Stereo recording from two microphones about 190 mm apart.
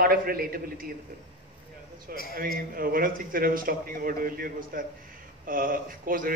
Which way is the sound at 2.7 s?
50° right (ahead or behind).